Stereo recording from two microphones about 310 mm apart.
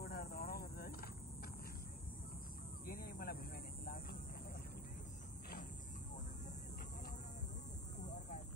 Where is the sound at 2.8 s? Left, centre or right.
Left.